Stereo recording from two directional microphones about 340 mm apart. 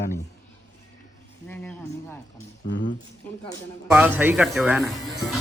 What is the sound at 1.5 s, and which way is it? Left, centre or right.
Speech, centre.